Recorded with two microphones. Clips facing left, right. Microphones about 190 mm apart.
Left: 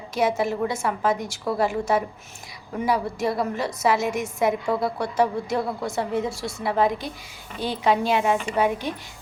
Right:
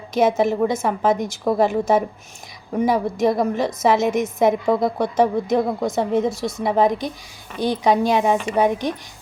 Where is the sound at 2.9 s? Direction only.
20° right (ahead or behind).